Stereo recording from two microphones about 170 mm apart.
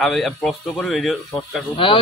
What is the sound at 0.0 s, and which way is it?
Speech, centre (ahead or behind).